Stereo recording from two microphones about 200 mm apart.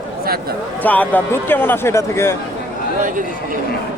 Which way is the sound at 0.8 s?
10° left (ahead or behind).